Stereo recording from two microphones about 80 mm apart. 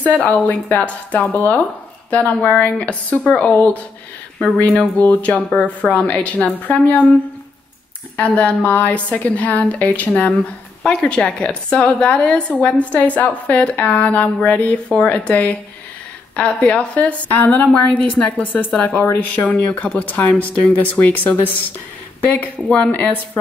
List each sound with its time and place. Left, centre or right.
0.0 s a woman's voice: centre
8.2 s a woman's voice: centre